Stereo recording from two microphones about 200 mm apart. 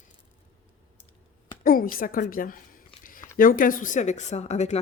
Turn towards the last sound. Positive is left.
turn(degrees=35)  # may be behind; listen again after turning